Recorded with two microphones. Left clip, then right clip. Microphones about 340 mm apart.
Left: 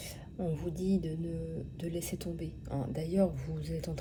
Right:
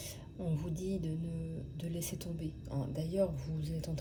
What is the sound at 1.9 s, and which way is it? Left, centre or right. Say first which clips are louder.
A woman's voice: left 3 dB; centre.